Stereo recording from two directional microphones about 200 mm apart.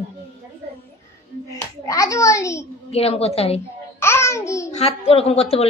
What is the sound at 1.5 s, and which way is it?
A child's voice, 15° left (ahead or behind).